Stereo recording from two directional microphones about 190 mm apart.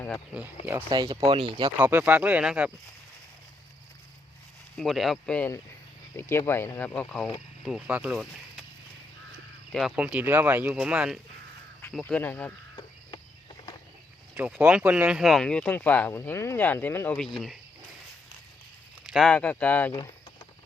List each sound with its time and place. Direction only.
0.6 s speech: 10° right (ahead or behind)
0.9 s speech: 25° right (ahead or behind)
1.8 s speech: 10° right (ahead or behind)
4.8 s speech: centre (ahead or behind)
9.7 s speech: 5° right (ahead or behind)
11.8 s speech: 10° left (ahead or behind)
14.3 s speech: 5° right (ahead or behind)
19.0 s speech: centre (ahead or behind)